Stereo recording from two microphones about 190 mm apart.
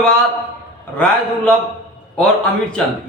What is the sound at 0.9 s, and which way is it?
Speech, 5° left (ahead or behind).